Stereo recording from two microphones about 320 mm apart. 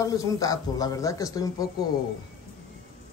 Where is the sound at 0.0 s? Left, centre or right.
Centre.